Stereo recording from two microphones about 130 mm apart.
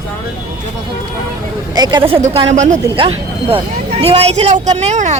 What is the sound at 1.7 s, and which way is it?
Speech, 35° right (ahead or behind).